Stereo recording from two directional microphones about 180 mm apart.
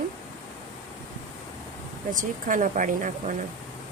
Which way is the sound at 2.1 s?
45° right (ahead or behind).